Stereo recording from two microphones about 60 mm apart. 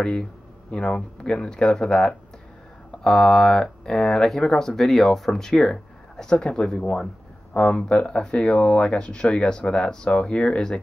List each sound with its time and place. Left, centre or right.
0.0 s speech: centre
7.5 s speech: left